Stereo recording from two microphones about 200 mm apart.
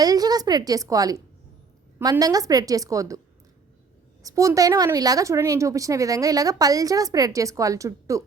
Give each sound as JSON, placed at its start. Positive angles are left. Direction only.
{"t": 0.0, "sound": "a woman's voice", "side_deg": -20}
{"t": 4.2, "sound": "speech", "side_deg": -15}